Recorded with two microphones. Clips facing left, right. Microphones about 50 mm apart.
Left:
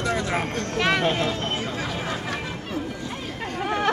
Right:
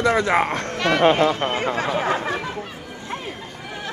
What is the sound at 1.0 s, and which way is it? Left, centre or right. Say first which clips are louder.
Speech: right 7 dB; right.